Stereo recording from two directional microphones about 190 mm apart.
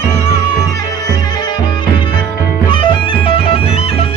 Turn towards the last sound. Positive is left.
turn(degrees=30)  # may be behind; listen again after turning